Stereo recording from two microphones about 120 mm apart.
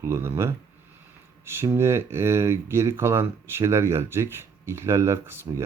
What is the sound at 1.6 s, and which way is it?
Speech, 20° right (ahead or behind).